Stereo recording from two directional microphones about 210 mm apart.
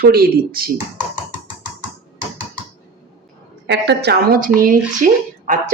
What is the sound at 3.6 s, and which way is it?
A woman's voice, 55° right (ahead or behind).